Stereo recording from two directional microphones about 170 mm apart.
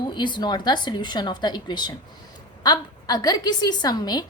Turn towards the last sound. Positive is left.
turn(degrees=25)  # may be behind; listen again after turning